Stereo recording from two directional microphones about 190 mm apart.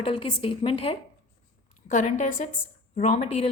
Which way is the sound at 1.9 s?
40° left (ahead or behind).